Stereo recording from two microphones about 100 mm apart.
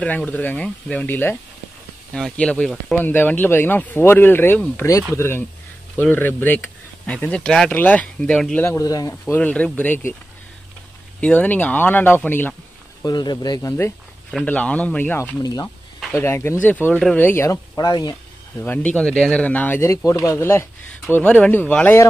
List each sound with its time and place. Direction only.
0.0 s speech: 15° left (ahead or behind)
2.1 s speech: 10° left (ahead or behind)
8.7 s speech: 35° left (ahead or behind)
9.3 s speech: 15° left (ahead or behind)
11.1 s speech: 15° left (ahead or behind)
13.0 s speech: 45° left (ahead or behind)
13.6 s speech: 25° left (ahead or behind)
14.4 s speech: 15° left (ahead or behind)
15.3 s speech: 35° left (ahead or behind)
16.1 s speech: 25° left (ahead or behind)
17.5 s speech: 40° left (ahead or behind)
18.6 s speech: 15° left (ahead or behind)
20.2 s speech: 25° left (ahead or behind)
21.1 s speech: 15° left (ahead or behind)